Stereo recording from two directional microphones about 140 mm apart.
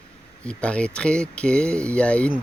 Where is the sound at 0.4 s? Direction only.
10° left (ahead or behind).